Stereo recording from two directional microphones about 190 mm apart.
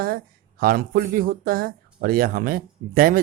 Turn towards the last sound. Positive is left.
turn(degrees=-50)  # may be behind; listen again after turning